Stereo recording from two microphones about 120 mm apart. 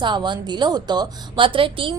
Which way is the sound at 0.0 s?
40° right (ahead or behind).